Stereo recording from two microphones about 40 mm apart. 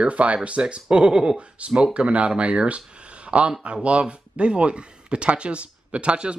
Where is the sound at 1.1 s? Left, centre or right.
Centre.